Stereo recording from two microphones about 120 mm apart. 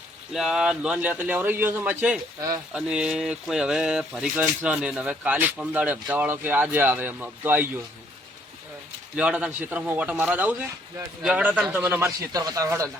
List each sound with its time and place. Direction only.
0.3 s speech: 5° right (ahead or behind)
9.1 s speech: 10° right (ahead or behind)
12.3 s speech: 30° right (ahead or behind)